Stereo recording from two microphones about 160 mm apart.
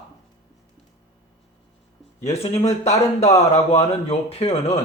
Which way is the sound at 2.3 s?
40° left (ahead or behind).